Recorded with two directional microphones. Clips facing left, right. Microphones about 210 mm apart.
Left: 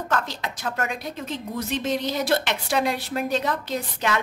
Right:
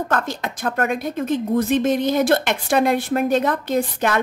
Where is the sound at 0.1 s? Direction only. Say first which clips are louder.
Right 4 dB; 50° right (ahead or behind).